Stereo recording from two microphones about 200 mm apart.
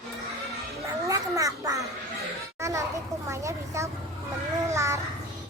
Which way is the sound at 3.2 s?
15° right (ahead or behind).